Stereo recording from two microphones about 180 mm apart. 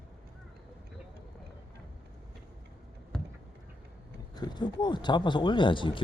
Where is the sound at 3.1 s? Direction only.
5° left (ahead or behind).